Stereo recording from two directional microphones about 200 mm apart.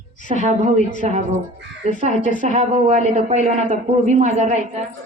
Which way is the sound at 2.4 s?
35° right (ahead or behind).